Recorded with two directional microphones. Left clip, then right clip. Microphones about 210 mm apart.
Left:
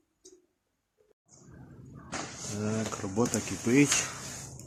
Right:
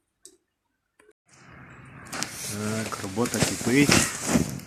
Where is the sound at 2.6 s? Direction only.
Centre (ahead or behind).